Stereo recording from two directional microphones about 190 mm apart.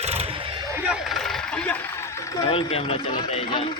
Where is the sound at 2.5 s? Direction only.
30° left (ahead or behind).